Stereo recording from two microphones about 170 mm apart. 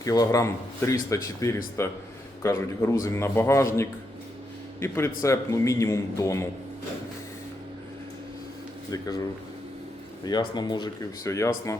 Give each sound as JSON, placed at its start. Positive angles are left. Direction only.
{"t": 0.0, "sound": "a man's voice", "side_deg": 20}
{"t": 8.9, "sound": "a man's voice", "side_deg": 20}
{"t": 10.2, "sound": "a man's voice", "side_deg": 25}